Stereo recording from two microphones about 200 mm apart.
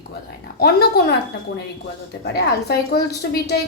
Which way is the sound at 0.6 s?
50° left (ahead or behind).